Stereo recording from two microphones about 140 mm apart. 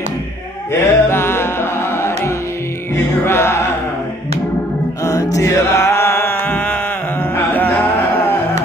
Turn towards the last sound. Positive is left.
turn(degrees=10)  # may be behind; listen again after turning